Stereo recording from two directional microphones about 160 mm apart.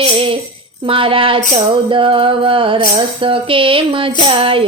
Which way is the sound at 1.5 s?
30° right (ahead or behind).